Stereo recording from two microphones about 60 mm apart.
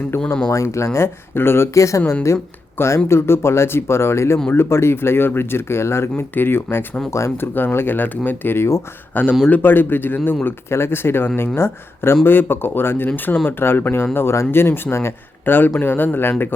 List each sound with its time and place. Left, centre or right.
0.1 s speech: left
0.9 s speech: left
9.2 s speech: left